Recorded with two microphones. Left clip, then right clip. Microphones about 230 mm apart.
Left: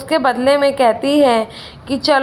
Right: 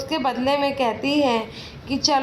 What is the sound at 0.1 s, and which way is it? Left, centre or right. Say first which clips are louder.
A woman's voice: left 9 dB; left.